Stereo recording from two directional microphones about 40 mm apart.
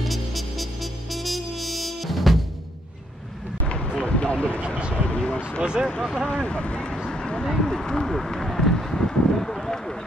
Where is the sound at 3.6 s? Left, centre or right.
Left.